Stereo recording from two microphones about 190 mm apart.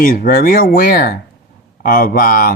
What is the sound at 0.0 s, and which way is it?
Speech, 50° left (ahead or behind).